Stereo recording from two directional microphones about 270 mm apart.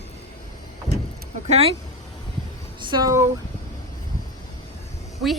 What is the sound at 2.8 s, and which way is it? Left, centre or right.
Speech, centre.